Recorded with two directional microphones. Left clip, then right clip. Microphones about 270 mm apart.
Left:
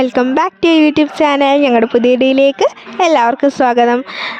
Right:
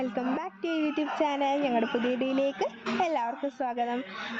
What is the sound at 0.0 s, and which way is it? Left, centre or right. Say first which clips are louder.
Speech: left 19 dB; left.